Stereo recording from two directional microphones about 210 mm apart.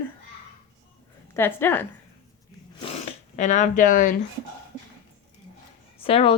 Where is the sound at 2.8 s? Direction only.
30° left (ahead or behind).